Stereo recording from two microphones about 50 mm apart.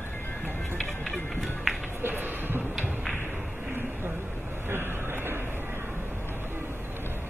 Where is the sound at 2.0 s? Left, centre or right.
Right.